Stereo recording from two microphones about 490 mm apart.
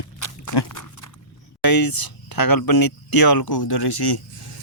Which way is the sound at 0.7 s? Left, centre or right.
Left.